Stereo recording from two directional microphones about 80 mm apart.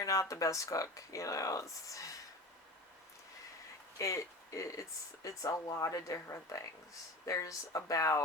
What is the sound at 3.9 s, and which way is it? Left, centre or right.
Speech, left.